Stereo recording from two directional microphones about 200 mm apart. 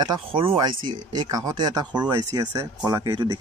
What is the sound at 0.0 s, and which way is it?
Speech, 25° right (ahead or behind).